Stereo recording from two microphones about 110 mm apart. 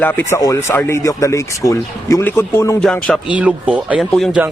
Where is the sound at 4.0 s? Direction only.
Centre (ahead or behind).